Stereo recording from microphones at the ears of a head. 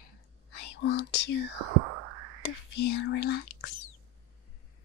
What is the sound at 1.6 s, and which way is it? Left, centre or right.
Whispering, right.